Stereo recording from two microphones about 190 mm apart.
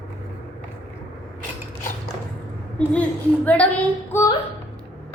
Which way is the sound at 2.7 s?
5° left (ahead or behind).